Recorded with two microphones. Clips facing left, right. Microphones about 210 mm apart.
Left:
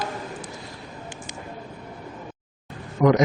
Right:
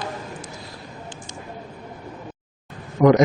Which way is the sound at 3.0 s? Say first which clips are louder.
Right 3 dB; 40° right (ahead or behind).